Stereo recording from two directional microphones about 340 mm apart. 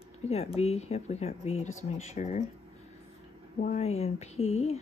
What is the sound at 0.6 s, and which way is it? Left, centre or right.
Speech, centre.